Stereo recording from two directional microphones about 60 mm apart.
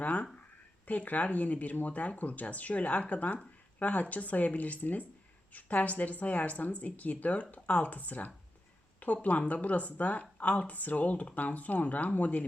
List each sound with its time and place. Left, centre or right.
0.0 s speech: left